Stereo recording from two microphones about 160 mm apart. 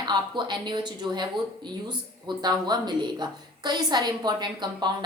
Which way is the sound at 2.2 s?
25° right (ahead or behind).